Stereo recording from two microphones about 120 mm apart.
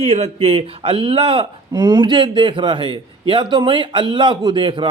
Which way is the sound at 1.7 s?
30° right (ahead or behind).